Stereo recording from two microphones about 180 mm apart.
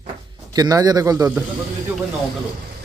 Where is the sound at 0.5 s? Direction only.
20° right (ahead or behind).